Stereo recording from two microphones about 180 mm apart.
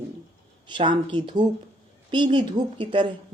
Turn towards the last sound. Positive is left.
turn(degrees=-25)  # may be behind; listen again after turning